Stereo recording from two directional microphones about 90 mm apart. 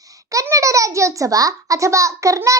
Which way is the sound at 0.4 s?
35° right (ahead or behind).